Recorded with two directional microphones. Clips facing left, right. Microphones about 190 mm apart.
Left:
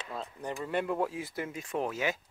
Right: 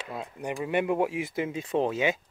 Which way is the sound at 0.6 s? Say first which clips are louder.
Right 5 dB; 15° right (ahead or behind).